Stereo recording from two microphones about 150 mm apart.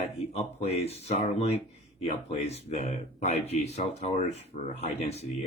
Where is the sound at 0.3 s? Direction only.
45° left (ahead or behind).